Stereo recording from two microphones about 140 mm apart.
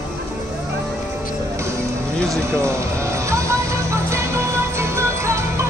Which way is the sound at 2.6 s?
20° right (ahead or behind).